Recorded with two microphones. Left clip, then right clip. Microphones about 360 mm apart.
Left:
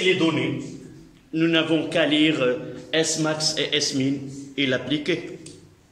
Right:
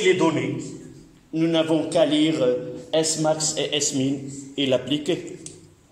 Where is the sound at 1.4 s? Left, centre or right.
Centre.